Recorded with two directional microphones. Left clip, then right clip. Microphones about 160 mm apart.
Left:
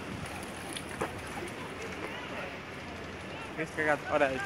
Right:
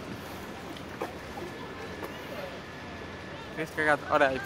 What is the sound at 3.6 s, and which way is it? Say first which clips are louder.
Speech: right 3 dB; 15° right (ahead or behind).